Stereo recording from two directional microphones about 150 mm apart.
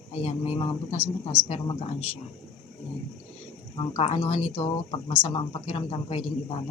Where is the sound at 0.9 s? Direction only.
10° left (ahead or behind).